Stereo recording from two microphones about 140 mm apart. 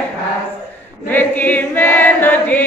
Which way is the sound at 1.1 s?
15° left (ahead or behind).